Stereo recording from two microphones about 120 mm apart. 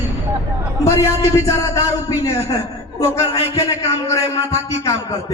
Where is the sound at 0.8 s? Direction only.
25° left (ahead or behind).